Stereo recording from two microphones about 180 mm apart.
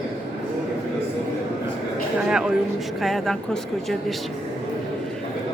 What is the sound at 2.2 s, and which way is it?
Speech, 5° right (ahead or behind).